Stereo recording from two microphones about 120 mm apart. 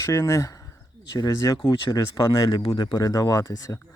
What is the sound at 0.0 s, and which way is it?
Speech, 25° left (ahead or behind).